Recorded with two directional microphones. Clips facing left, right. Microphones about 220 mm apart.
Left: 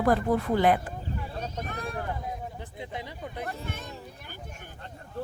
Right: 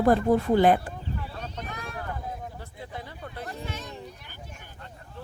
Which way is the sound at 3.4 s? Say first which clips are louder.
Right 1 dB; 55° left (ahead or behind).